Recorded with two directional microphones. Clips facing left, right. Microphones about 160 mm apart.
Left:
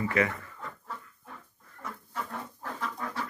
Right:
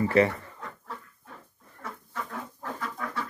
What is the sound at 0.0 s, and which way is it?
Speech, 30° right (ahead or behind).